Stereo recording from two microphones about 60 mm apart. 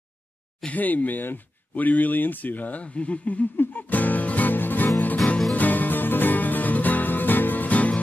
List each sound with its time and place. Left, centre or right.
0.7 s speech: left
3.5 s music: left